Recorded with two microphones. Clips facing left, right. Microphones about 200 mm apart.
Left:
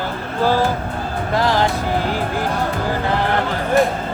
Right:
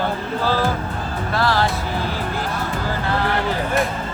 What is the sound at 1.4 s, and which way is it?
Speech, 15° left (ahead or behind).